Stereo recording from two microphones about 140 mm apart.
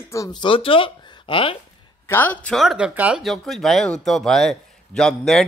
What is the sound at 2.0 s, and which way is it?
Speech, 15° left (ahead or behind).